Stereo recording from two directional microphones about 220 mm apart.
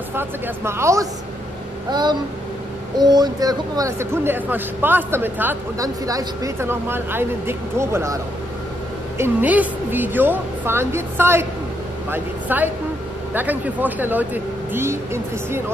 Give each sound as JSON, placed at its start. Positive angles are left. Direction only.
{"t": 0.1, "sound": "speech", "side_deg": -10}
{"t": 1.9, "sound": "a sound", "side_deg": -20}
{"t": 3.0, "sound": "speech", "side_deg": -20}
{"t": 9.2, "sound": "speech", "side_deg": -5}